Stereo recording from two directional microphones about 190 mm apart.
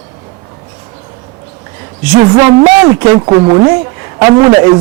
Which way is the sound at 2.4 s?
20° right (ahead or behind).